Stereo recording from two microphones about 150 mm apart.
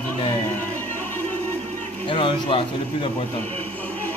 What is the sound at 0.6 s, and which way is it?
Music, 10° left (ahead or behind).